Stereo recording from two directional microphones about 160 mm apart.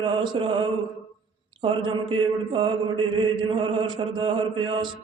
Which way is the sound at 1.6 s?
30° right (ahead or behind).